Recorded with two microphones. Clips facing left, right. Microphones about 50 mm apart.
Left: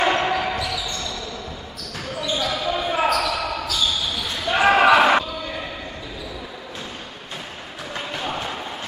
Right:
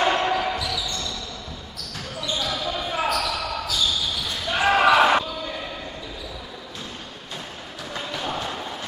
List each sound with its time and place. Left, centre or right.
0.0 s basketball bounce: centre
2.3 s basketball bounce: left
7.9 s a sound: left